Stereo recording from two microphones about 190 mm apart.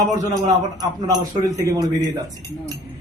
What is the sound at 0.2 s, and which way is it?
A man's voice, 20° right (ahead or behind).